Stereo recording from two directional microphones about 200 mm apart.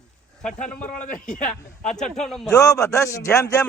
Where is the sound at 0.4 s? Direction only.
5° left (ahead or behind).